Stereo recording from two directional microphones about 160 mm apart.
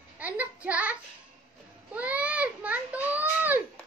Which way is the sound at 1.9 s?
10° right (ahead or behind).